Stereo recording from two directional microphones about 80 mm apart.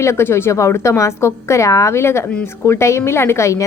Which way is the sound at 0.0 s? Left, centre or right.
Left.